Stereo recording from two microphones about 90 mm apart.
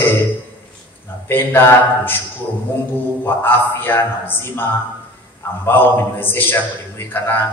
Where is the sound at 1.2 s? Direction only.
25° left (ahead or behind).